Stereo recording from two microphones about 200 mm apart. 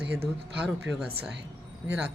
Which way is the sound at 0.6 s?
5° right (ahead or behind).